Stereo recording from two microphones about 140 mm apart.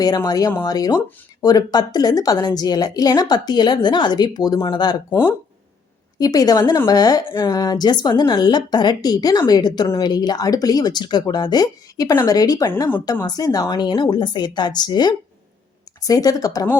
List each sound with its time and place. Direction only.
0.0 s a woman's voice: 30° left (ahead or behind)
6.1 s a woman's voice: 25° left (ahead or behind)